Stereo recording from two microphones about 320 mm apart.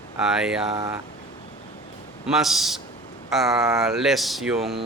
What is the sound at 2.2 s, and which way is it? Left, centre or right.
Speech, centre.